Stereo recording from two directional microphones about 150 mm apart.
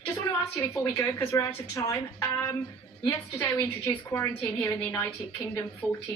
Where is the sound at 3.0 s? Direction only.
20° left (ahead or behind).